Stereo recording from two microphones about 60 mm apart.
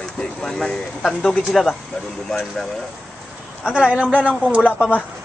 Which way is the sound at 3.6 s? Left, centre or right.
Centre.